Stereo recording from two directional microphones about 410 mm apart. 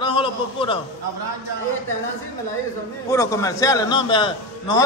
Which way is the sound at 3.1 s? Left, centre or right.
Centre.